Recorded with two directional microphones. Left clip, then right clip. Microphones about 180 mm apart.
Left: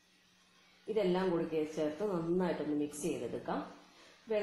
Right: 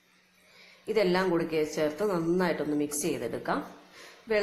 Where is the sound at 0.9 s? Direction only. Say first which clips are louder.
Right 7 dB; 15° right (ahead or behind).